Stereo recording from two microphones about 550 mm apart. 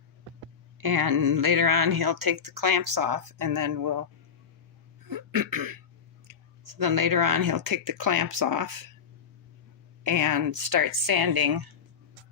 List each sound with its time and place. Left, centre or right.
0.8 s a woman's voice: right
5.0 s cough: right
6.2 s a woman's voice: right
10.0 s a woman's voice: right